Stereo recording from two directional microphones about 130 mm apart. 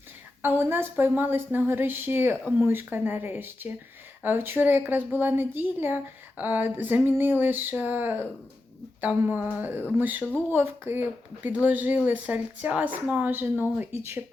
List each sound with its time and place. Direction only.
0.4 s a woman's voice: 15° right (ahead or behind)